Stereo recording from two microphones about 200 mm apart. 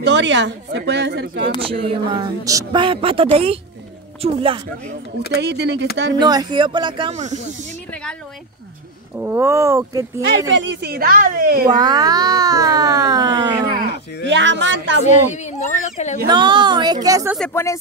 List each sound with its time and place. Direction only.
0.0 s speech: 60° right (ahead or behind)
1.6 s a child's voice: 25° right (ahead or behind)
5.4 s speech: 60° right (ahead or behind)
6.1 s a child's voice: 20° right (ahead or behind)
7.9 s a sound: 5° left (ahead or behind)
9.1 s speech: 10° right (ahead or behind)
10.5 s speech: 65° right (ahead or behind); by 11.7 s 45° right (ahead or behind)
11.7 s a child's voice: 20° right (ahead or behind)
13.7 s speech: 55° right (ahead or behind)
15.0 s speech: 35° left (ahead or behind)
16.3 s a child's voice: 25° right (ahead or behind)
17.4 s speech: 10° left (ahead or behind)